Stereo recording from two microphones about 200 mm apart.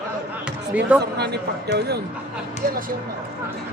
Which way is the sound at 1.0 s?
55° right (ahead or behind).